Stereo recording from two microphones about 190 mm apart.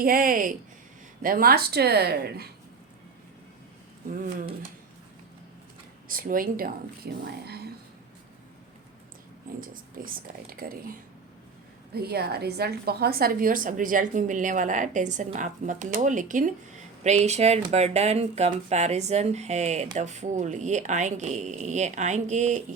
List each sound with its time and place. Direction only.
0.0 s a woman's voice: 50° right (ahead or behind)
4.1 s a woman's voice: 45° right (ahead or behind)
6.1 s a woman's voice: 45° right (ahead or behind)
9.6 s a woman's voice: 45° right (ahead or behind)
11.9 s a woman's voice: 55° right (ahead or behind); by 22.6 s 40° right (ahead or behind)